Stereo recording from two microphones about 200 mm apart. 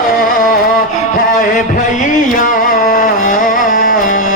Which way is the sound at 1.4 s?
40° left (ahead or behind).